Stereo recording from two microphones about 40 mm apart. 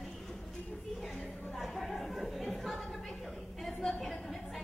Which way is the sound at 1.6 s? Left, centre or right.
Centre.